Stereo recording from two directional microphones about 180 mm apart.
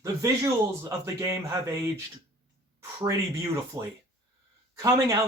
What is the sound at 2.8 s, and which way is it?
Speech, 15° right (ahead or behind).